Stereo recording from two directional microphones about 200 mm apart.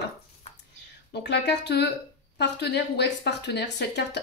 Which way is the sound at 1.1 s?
60° left (ahead or behind).